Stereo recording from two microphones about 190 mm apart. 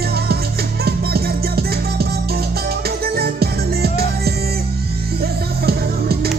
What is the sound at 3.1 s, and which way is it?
Music, 55° right (ahead or behind).